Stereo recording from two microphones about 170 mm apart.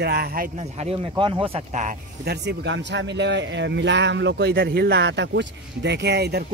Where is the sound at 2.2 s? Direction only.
80° right.